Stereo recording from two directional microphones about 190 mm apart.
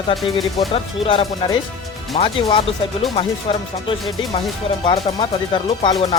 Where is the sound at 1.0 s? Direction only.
25° left (ahead or behind).